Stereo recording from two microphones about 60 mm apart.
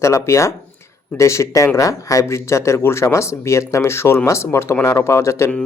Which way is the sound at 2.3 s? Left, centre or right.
Left.